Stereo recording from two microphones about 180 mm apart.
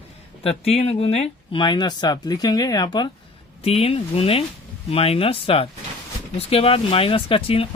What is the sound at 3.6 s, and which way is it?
Speech, 35° left (ahead or behind).